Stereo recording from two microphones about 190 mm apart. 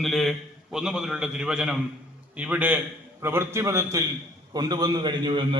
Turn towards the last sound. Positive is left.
turn(degrees=-25)  # may be behind; listen again after turning